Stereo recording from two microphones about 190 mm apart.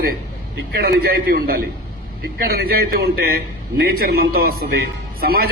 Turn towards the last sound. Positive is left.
turn(degrees=-50)  # may be behind; listen again after turning